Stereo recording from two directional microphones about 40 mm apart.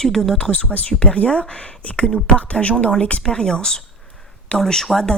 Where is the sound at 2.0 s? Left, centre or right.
Left.